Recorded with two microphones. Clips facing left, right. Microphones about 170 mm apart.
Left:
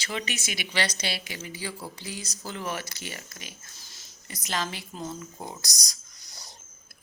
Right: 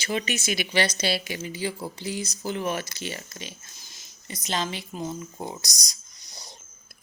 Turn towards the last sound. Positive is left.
turn(degrees=-20)  # may be behind; listen again after turning